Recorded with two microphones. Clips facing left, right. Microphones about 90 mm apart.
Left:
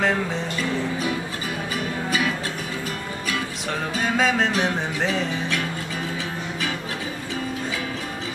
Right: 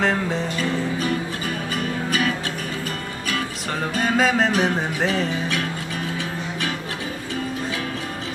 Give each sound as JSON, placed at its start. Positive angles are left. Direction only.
{"t": 0.0, "sound": "music", "side_deg": 0}
{"t": 3.9, "sound": "music", "side_deg": 0}